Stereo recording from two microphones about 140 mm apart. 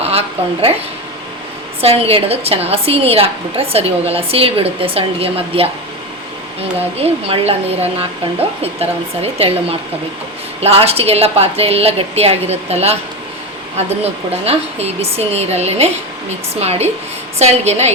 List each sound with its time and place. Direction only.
0.0 s a sound: 45° right (ahead or behind)
1.8 s a woman's voice: 45° right (ahead or behind)
6.7 s a woman's voice: 45° right (ahead or behind)